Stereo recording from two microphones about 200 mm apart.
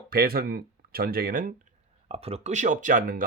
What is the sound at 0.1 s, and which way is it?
Speech, 50° right (ahead or behind).